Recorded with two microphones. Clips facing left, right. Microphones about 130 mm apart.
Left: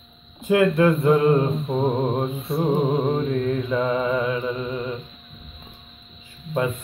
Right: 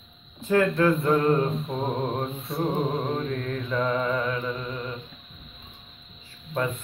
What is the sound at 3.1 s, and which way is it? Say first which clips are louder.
Mantra: left 6 dB; 10° left (ahead or behind).